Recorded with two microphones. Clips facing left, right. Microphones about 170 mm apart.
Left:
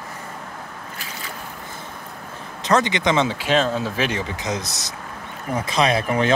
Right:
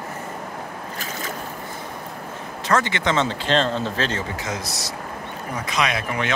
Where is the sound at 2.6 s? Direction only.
20° left (ahead or behind).